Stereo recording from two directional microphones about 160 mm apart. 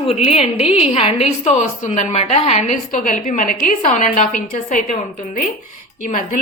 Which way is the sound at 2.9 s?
60° left (ahead or behind).